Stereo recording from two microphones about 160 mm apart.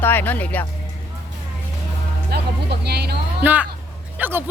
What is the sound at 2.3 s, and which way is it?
Speech, 90° right.